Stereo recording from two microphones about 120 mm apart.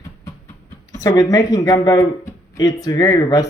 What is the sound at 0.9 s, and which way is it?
Speech, 30° left (ahead or behind).